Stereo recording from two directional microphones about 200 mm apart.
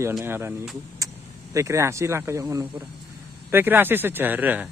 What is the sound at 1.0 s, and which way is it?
Vehicle, 15° right (ahead or behind).